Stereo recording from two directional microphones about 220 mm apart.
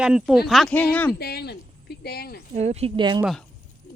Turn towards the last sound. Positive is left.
turn(degrees=-20)  # may be behind; listen again after turning